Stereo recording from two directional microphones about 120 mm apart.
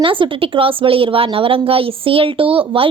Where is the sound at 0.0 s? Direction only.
45° right (ahead or behind).